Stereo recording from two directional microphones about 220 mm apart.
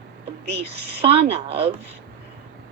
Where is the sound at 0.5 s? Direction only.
25° right (ahead or behind).